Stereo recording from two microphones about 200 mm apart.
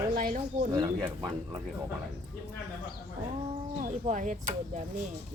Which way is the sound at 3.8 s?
40° right (ahead or behind).